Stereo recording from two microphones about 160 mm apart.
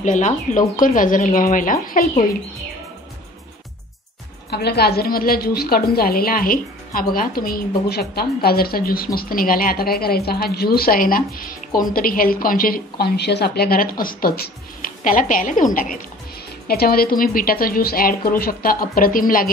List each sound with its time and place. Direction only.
0.0 s a woman's voice: 50° left (ahead or behind)
4.5 s a woman's voice: 90° left; by 16.0 s 60° left (ahead or behind)
16.6 s a woman's voice: 70° left (ahead or behind)